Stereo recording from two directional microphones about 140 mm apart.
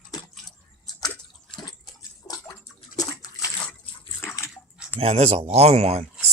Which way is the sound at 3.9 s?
40° left (ahead or behind).